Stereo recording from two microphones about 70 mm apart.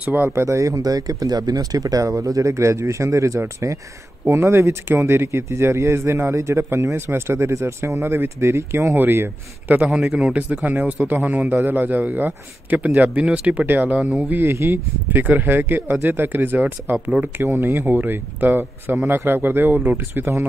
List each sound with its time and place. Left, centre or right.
0.0 s a man's voice: right
0.3 s speech: right
9.8 s speech: centre
10.3 s a man's voice: right
14.3 s speech: right
15.2 s a man's voice: right